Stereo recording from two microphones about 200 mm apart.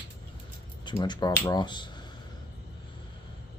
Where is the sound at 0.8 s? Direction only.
20° left (ahead or behind).